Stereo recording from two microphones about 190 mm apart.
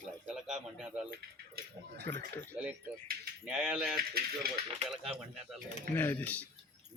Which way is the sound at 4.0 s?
50° right (ahead or behind).